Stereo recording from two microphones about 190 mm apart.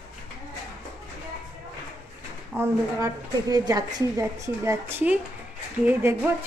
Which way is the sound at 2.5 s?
15° right (ahead or behind).